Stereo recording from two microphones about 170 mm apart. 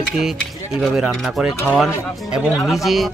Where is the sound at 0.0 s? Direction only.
Centre (ahead or behind).